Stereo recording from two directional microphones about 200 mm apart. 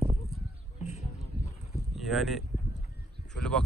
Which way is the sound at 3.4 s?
5° left (ahead or behind).